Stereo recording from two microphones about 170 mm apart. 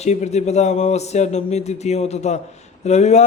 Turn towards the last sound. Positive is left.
turn(degrees=40)  # may be behind; listen again after turning